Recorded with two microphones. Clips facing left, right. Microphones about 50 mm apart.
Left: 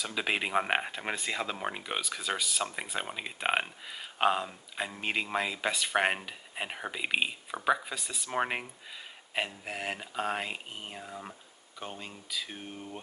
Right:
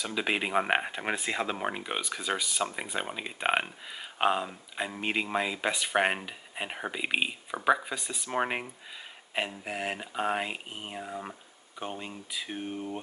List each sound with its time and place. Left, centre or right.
0.0 s speech: centre